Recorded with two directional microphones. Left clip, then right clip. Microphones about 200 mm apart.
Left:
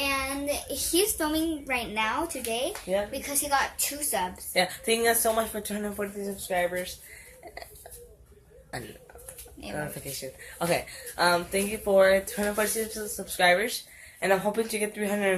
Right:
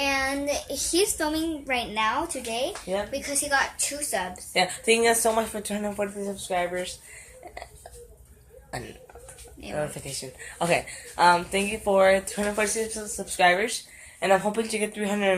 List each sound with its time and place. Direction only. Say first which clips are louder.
0.0 s a child's voice: right 3 dB; 10° left (ahead or behind)
3.1 s a woman's voice: right 2 dB; 15° left (ahead or behind)
4.5 s speech: right 4 dB; 15° right (ahead or behind)
8.7 s speech: right 2 dB; 10° right (ahead or behind)